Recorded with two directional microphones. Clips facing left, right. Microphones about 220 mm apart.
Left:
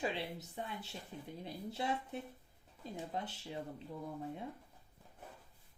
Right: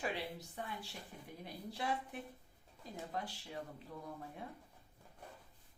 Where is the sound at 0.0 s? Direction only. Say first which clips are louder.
Left 2 dB; 25° left (ahead or behind).